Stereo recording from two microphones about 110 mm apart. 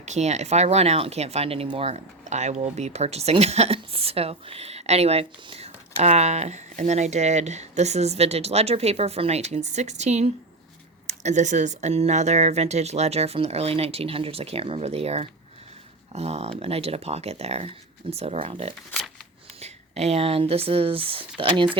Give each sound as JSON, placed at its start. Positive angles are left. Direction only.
{"t": 0.0, "sound": "speech", "side_deg": -90}
{"t": 19.5, "sound": "speech", "side_deg": -75}